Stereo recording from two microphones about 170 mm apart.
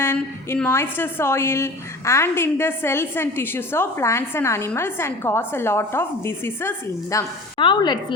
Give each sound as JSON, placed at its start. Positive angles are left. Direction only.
{"t": 0.0, "sound": "a woman's voice", "side_deg": 15}
{"t": 7.6, "sound": "a woman's voice", "side_deg": 25}